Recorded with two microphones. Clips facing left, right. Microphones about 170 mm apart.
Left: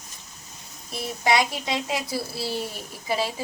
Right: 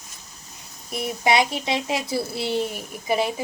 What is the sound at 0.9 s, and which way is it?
A woman's voice, 20° right (ahead or behind).